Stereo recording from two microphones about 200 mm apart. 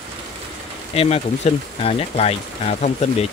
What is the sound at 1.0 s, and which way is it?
Speech, 30° left (ahead or behind).